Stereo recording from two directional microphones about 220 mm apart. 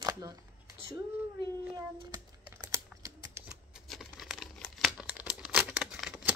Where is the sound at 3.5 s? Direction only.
Centre (ahead or behind).